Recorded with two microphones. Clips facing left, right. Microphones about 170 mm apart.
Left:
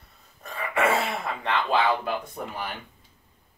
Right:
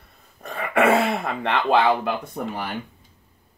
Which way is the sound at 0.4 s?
60° right (ahead or behind).